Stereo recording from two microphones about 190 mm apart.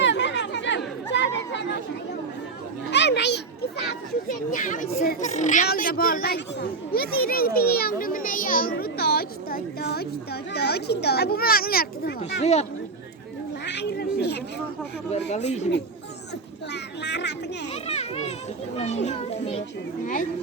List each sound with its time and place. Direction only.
0.0 s chatter: 70° left (ahead or behind)
2.9 s a sound: 65° left (ahead or behind)
3.8 s a child's voice: 45° left (ahead or behind)
5.6 s a child's voice: 50° left (ahead or behind)
12.4 s a child's voice: 35° left (ahead or behind)
13.7 s a sound: 60° left (ahead or behind)
15.3 s a child's voice: 35° left (ahead or behind)
16.7 s speech: 65° left (ahead or behind)
17.8 s a child's voice: 35° left (ahead or behind)